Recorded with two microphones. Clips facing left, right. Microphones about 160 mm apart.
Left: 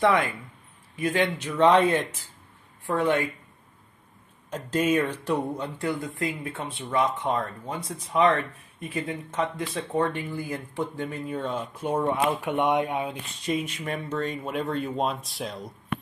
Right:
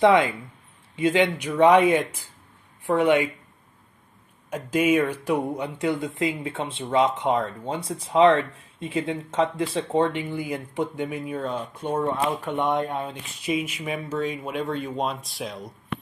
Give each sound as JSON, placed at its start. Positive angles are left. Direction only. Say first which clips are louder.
{"t": 0.0, "sound": "speech", "louder": "right 5 dB", "side_deg": -20}
{"t": 4.5, "sound": "speech", "louder": "right 3 dB", "side_deg": -10}
{"t": 11.8, "sound": "speech", "louder": "even", "side_deg": 10}
{"t": 13.1, "sound": "speech", "louder": "right 1 dB", "side_deg": -5}